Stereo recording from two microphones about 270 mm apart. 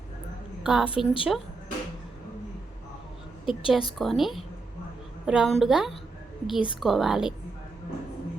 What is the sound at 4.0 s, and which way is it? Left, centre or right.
Speech, centre.